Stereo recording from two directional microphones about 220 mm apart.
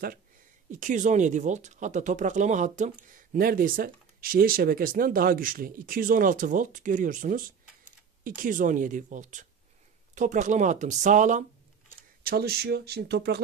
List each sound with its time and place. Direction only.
0.7 s speech: 35° right (ahead or behind)